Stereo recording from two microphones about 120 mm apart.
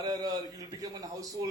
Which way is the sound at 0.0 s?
30° right (ahead or behind).